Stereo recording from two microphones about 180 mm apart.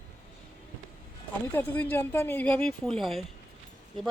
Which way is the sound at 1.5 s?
10° left (ahead or behind).